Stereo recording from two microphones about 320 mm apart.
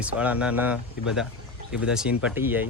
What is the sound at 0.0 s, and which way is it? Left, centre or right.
Speech, centre.